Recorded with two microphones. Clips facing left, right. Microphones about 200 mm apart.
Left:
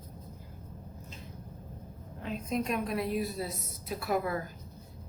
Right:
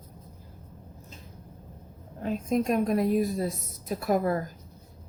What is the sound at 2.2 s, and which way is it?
A woman's voice, 45° right (ahead or behind).